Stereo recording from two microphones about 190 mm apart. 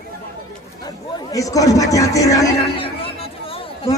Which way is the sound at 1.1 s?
20° left (ahead or behind).